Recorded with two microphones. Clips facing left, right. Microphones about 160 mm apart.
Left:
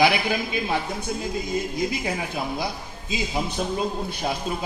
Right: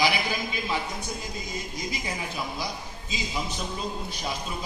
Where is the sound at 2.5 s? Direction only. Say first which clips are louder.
Left 5 dB; 55° left (ahead or behind).